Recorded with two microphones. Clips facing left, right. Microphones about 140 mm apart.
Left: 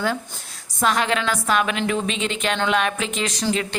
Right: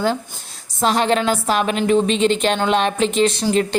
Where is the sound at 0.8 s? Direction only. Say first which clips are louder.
Right 4 dB; 30° right (ahead or behind).